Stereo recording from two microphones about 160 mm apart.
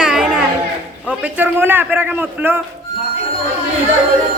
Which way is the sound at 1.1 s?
10° right (ahead or behind).